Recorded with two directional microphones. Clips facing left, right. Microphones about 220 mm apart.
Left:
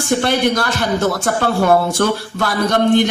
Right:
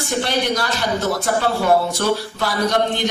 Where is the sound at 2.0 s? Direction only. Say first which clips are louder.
Left 3 dB; 55° left (ahead or behind).